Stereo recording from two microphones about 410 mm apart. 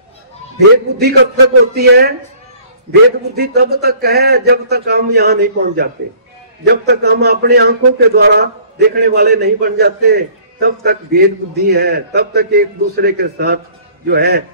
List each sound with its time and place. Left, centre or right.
0.9 s a man's voice: right
3.3 s a man's voice: right